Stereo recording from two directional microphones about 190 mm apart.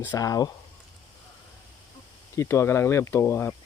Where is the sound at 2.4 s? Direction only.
15° left (ahead or behind).